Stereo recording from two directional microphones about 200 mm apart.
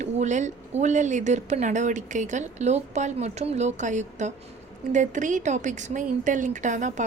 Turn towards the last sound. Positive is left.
turn(degrees=-40)  # may be behind; listen again after turning